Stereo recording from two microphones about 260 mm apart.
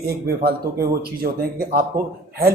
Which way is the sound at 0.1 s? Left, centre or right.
Right.